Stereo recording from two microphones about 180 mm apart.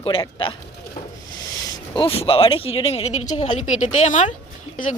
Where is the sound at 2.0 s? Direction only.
30° left (ahead or behind).